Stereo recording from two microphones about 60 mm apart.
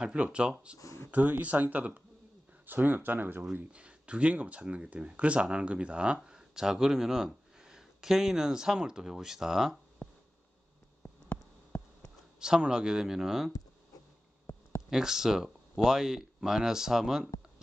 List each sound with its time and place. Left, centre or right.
0.0 s speech: centre
1.1 s speech: right
3.7 s speech: centre
12.4 s speech: centre
14.5 s a sound: left
14.9 s speech: centre